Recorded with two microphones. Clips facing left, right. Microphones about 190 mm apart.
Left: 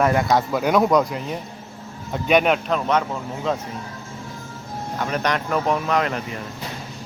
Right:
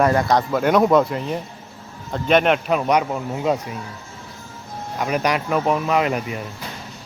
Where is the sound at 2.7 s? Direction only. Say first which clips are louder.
Right 2 dB; 15° right (ahead or behind).